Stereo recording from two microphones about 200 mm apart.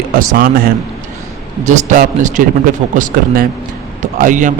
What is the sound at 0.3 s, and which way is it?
Speech, 45° right (ahead or behind).